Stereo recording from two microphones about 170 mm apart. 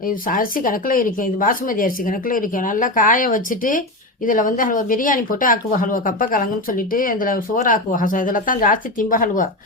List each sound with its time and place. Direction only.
0.0 s speech: 55° left (ahead or behind)